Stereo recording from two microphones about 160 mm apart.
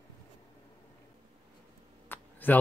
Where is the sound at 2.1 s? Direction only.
15° left (ahead or behind).